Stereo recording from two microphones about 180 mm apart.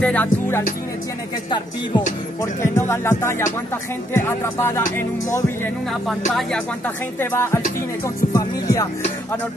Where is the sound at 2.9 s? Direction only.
15° left (ahead or behind).